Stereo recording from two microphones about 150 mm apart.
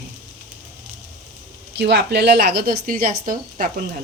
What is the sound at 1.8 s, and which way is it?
A woman's voice, 90° right.